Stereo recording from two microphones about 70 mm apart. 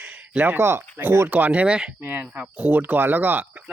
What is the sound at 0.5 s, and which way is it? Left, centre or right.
Speech, right.